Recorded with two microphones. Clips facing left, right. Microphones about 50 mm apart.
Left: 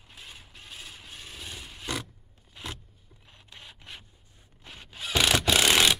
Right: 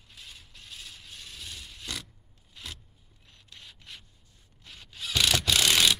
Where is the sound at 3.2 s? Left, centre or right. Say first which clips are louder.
Left 2 dB; left.